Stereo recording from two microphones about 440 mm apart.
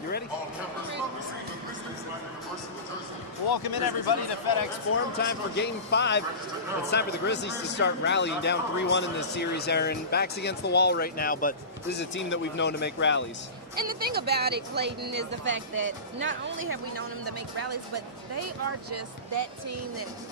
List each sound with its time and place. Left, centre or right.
3.5 s speech: left
4.9 s a man's voice: left
13.7 s speech: centre; by 20.1 s right